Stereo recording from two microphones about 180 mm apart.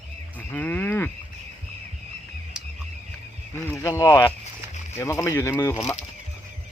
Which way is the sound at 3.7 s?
20° left (ahead or behind).